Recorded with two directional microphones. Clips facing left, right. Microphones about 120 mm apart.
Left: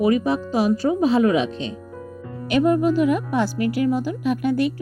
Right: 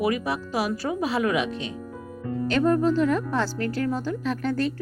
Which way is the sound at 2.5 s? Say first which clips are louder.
Left 3 dB; 15° left (ahead or behind).